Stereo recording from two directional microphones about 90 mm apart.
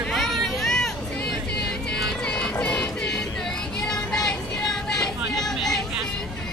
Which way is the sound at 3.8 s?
5° left (ahead or behind).